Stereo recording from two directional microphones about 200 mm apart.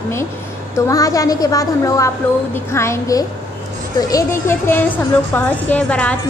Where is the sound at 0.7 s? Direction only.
15° left (ahead or behind).